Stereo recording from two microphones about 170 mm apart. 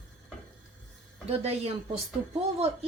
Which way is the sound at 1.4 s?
35° right (ahead or behind).